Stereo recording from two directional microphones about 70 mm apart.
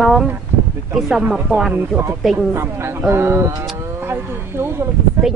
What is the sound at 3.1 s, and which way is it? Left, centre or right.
Speech, right.